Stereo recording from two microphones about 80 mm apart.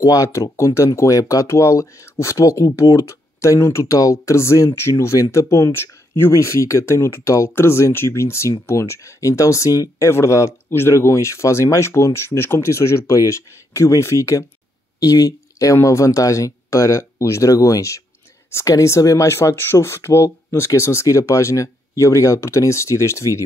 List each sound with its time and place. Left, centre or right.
0.0 s speech: left